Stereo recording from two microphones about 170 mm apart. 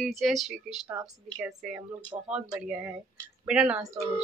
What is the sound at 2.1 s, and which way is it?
Speech, 25° right (ahead or behind).